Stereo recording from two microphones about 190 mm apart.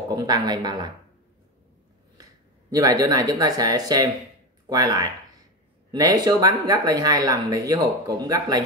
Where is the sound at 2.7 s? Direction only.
20° right (ahead or behind).